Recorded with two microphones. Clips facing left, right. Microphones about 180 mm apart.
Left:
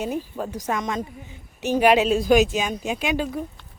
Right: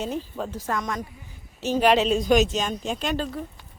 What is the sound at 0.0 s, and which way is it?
Speech, 10° left (ahead or behind).